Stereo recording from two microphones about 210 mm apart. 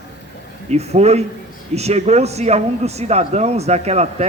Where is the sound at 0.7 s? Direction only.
30° right (ahead or behind).